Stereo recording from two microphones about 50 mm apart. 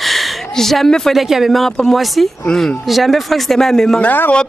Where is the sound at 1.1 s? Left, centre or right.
Centre.